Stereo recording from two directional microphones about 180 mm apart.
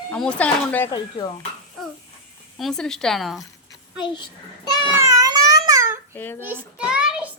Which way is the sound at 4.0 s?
25° left (ahead or behind).